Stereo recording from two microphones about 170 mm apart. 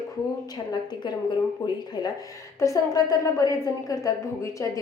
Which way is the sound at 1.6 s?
20° left (ahead or behind).